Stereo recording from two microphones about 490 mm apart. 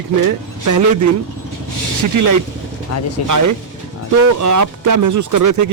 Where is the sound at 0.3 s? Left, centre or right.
Right.